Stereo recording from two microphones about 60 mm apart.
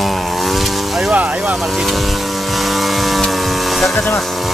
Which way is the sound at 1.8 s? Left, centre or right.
Centre.